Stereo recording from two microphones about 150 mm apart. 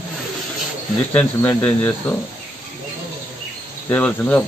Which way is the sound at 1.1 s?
10° left (ahead or behind).